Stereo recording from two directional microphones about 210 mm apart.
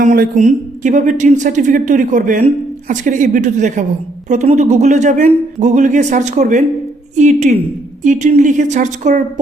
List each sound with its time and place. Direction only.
0.0 s a woman's voice: 40° right (ahead or behind)